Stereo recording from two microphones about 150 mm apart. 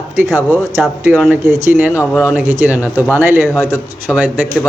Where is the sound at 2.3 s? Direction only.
10° right (ahead or behind).